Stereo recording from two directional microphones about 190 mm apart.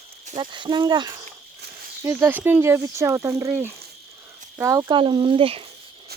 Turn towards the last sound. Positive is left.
turn(degrees=-30)  # may be behind; listen again after turning